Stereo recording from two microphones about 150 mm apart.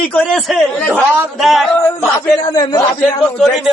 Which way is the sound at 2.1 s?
20° left (ahead or behind).